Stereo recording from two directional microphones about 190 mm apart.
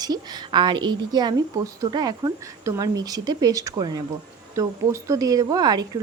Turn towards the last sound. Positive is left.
turn(degrees=-20)  # may be behind; listen again after turning